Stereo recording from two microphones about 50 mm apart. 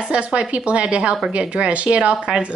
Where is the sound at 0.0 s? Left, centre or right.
Right.